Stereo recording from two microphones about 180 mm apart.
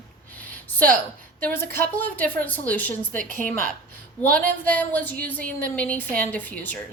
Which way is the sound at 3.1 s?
50° right (ahead or behind).